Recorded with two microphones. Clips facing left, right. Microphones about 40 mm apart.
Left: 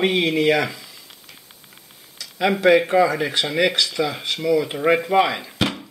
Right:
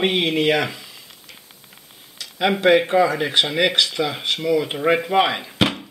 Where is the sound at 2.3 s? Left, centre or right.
Centre.